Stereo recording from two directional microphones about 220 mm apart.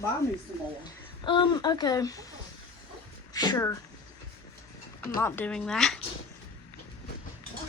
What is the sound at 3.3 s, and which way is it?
Speech, 15° left (ahead or behind).